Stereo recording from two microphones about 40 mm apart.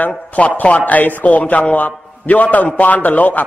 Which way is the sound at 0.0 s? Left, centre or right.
Left.